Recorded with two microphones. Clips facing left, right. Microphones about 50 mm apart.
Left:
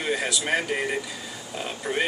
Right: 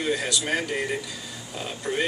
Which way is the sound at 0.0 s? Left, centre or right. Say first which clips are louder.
Even; centre.